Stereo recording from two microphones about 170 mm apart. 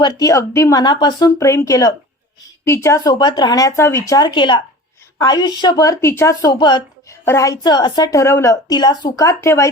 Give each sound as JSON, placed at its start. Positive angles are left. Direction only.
{"t": 0.0, "sound": "a woman's voice", "side_deg": 20}